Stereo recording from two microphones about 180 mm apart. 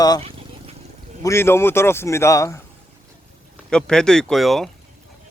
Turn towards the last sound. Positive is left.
turn(degrees=0)  # may be behind; listen again after turning